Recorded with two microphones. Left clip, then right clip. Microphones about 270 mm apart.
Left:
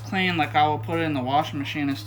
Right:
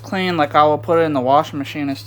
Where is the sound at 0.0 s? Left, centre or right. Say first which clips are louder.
Right 5 dB; centre.